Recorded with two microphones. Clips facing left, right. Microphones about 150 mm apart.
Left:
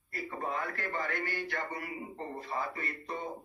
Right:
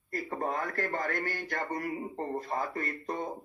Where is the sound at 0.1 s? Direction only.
40° right (ahead or behind).